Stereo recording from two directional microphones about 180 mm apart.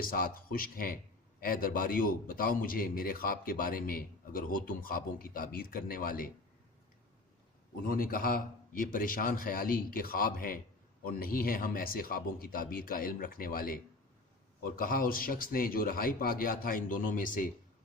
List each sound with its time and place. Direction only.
0.0 s a man's voice: 50° left (ahead or behind)
7.9 s a man's voice: 55° left (ahead or behind)